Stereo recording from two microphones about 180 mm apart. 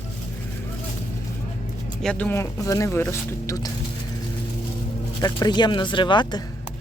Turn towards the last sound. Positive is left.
turn(degrees=25)  # may be behind; listen again after turning